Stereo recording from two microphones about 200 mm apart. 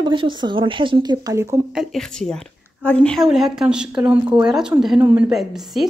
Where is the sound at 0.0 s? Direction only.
25° right (ahead or behind).